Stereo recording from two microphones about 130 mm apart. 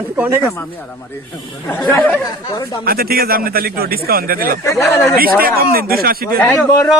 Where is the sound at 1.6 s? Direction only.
15° left (ahead or behind).